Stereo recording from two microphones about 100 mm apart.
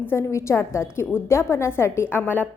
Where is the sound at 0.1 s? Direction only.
30° left (ahead or behind).